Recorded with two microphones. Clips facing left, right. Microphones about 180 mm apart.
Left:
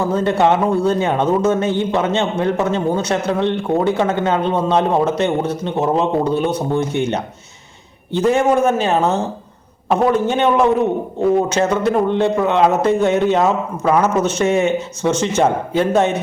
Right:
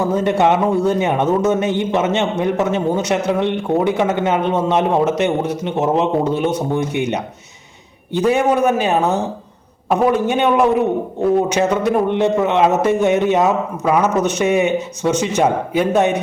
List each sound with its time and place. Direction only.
0.0 s a man's voice: 15° right (ahead or behind)